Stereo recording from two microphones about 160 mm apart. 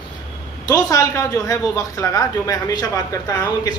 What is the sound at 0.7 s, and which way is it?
Speech, 20° left (ahead or behind).